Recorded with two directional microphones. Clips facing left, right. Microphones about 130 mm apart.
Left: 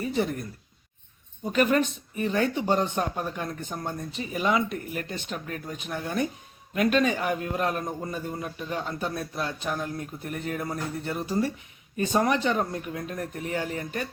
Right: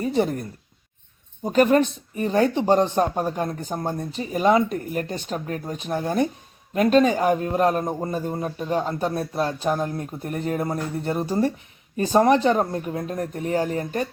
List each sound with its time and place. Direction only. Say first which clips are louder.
0.0 s speech: right 5 dB; 35° right (ahead or behind)
1.5 s speech: right 5 dB; 35° right (ahead or behind)